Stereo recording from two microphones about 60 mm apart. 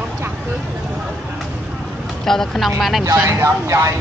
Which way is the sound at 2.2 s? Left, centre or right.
Centre.